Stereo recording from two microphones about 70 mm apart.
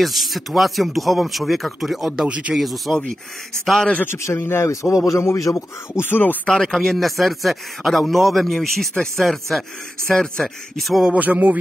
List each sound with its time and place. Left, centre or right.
0.0 s speech: centre
2.2 s speech: centre
2.5 s speech: centre
3.9 s a man's voice: left
6.0 s a man's voice: left
6.4 s speech: centre
11.1 s speech: right